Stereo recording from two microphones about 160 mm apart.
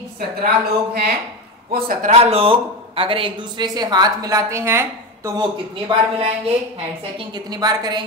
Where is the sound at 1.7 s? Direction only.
65° right (ahead or behind).